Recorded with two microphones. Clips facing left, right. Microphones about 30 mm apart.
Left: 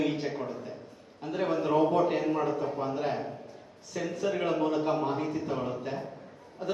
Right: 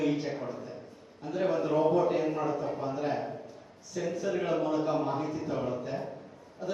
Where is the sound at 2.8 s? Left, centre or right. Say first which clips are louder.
Left 2 dB; left.